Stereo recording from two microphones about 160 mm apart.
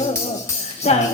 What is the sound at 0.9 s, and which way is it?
Speech, 40° left (ahead or behind).